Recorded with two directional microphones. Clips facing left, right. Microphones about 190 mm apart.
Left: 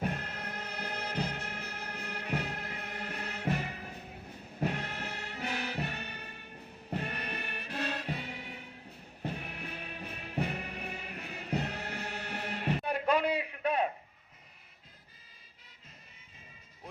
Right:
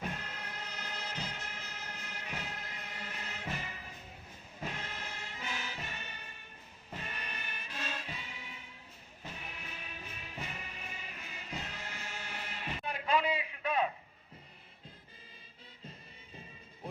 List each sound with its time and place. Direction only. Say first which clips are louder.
0.0 s music: left 5 dB; 55° left (ahead or behind)